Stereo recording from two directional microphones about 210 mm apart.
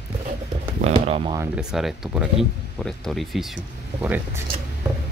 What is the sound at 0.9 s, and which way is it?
Speech, 25° right (ahead or behind).